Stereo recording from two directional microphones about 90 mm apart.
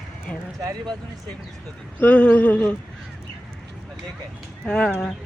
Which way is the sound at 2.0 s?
15° left (ahead or behind).